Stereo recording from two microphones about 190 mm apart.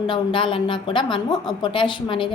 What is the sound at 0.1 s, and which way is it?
Speech, 25° left (ahead or behind).